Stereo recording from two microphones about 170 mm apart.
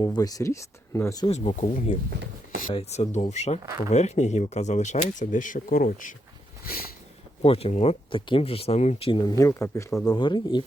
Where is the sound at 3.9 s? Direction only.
40° left (ahead or behind).